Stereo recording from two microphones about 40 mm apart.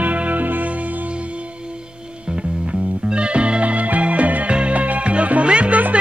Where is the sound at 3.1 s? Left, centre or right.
Right.